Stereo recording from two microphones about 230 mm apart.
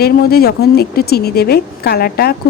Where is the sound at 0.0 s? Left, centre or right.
Left.